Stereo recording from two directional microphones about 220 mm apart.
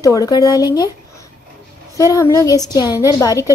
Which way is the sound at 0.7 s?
15° left (ahead or behind).